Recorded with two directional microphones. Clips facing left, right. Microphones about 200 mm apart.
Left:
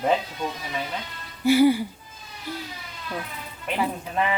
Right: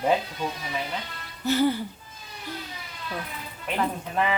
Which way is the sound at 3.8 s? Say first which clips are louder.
Left 1 dB; 5° left (ahead or behind).